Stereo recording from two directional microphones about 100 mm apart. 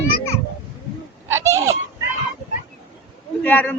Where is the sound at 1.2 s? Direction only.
25° right (ahead or behind).